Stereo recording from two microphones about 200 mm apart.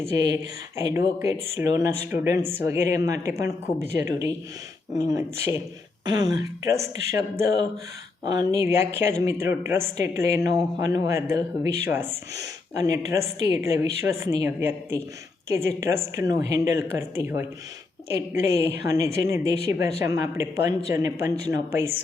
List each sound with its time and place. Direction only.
0.0 s speech: 15° right (ahead or behind)